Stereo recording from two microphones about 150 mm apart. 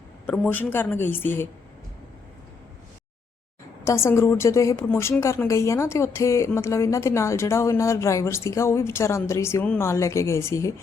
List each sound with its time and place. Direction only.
0.3 s a woman's voice: 10° left (ahead or behind)
3.8 s a woman's voice: 15° left (ahead or behind)